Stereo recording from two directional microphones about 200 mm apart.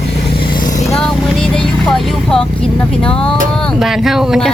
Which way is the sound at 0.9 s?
5° left (ahead or behind).